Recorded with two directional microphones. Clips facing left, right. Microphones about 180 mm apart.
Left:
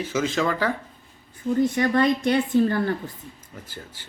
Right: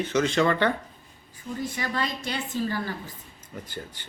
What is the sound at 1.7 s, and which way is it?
A woman's voice, 55° left (ahead or behind).